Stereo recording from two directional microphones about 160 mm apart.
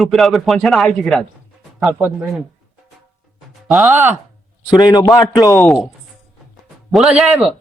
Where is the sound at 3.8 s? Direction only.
15° right (ahead or behind).